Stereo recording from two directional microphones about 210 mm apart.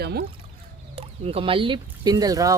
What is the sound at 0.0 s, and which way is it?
Speech, 50° right (ahead or behind).